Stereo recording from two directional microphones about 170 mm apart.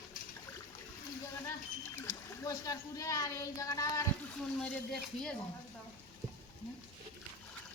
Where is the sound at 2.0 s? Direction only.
20° left (ahead or behind).